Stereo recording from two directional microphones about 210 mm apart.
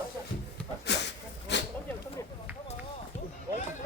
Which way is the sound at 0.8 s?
55° left (ahead or behind).